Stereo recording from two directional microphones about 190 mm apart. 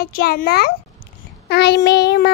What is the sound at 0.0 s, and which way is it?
A child's voice, 55° left (ahead or behind).